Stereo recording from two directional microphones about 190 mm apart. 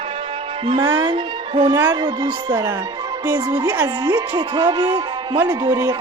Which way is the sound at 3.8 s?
20° right (ahead or behind).